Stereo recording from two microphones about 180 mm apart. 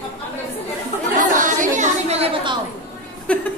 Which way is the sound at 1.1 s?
45° right (ahead or behind).